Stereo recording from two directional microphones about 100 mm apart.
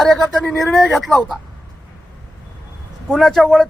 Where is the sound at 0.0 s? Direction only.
Centre (ahead or behind).